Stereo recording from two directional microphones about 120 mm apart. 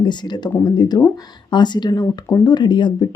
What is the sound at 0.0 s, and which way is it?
Speech, 40° left (ahead or behind).